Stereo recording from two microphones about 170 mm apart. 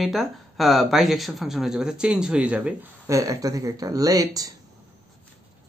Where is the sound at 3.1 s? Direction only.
20° right (ahead or behind).